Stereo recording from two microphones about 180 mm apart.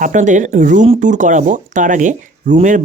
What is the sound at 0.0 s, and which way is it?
Speech, 45° right (ahead or behind).